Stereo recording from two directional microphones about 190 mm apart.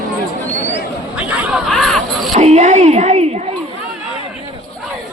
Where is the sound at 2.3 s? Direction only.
35° right (ahead or behind).